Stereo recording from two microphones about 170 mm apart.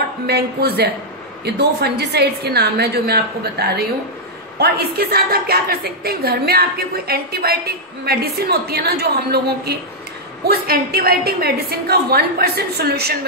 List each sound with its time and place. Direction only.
0.3 s a woman's voice: 70° right (ahead or behind)